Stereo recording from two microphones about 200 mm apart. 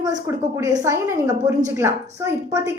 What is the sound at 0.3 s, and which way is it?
A woman's voice, 15° right (ahead or behind).